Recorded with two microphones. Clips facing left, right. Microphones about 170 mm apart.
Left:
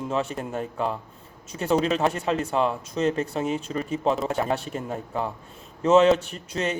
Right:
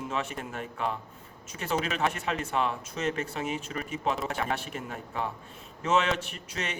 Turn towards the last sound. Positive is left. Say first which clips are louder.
# left 8 dB
turn(degrees=35)  # may be behind; listen again after turning